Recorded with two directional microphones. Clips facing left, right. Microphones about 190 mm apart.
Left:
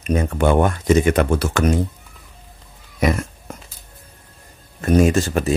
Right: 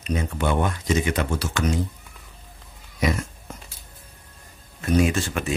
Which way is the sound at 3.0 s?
55° left (ahead or behind).